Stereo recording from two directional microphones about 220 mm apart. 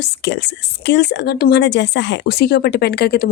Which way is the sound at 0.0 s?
55° left (ahead or behind).